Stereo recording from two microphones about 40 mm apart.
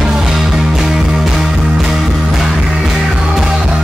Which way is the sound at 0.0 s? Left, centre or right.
Centre.